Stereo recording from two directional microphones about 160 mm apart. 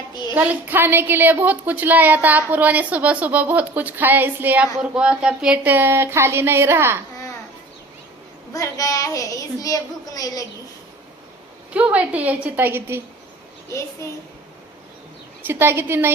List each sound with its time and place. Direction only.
0.3 s a woman's voice: 10° right (ahead or behind)
8.5 s a woman's voice: 20° left (ahead or behind)
11.7 s a woman's voice: 10° right (ahead or behind)
15.4 s a woman's voice: 15° right (ahead or behind)